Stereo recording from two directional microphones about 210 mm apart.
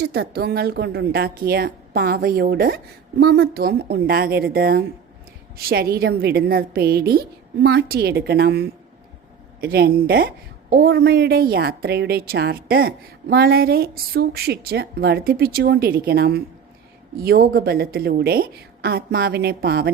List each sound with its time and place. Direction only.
0.0 s a woman's voice: 50° right (ahead or behind)